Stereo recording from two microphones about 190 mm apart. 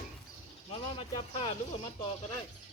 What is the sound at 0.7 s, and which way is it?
Speech, 25° left (ahead or behind).